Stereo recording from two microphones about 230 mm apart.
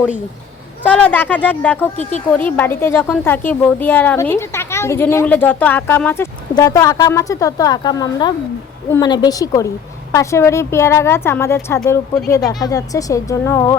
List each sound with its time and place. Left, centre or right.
0.8 s speech: centre